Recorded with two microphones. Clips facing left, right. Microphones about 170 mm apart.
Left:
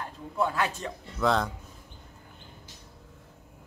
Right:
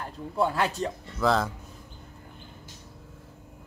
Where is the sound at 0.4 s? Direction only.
35° right (ahead or behind).